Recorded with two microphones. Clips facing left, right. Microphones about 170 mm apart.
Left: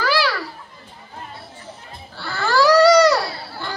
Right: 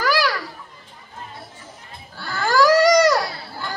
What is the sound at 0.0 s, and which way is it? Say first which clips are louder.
Children playing: even; 45° right (ahead or behind).